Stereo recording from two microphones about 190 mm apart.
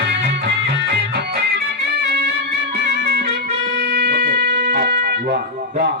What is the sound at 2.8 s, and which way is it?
Music, 60° right (ahead or behind).